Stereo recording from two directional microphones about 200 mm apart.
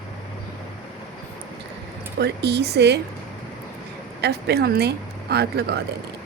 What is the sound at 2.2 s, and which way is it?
Speech, 55° right (ahead or behind).